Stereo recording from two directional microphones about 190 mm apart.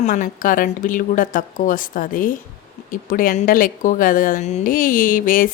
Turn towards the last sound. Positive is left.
turn(degrees=45)  # may be behind; listen again after turning